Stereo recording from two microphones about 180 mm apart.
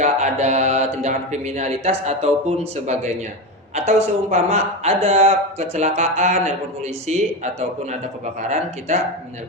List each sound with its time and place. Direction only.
0.0 s speech: 40° right (ahead or behind)